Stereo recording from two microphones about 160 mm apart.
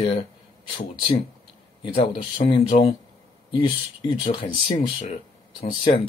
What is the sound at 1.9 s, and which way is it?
Speech, 40° left (ahead or behind).